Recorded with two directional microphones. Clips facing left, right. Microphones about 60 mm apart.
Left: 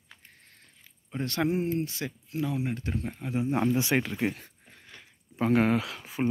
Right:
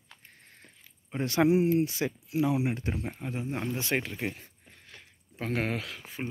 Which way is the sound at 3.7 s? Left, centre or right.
Centre.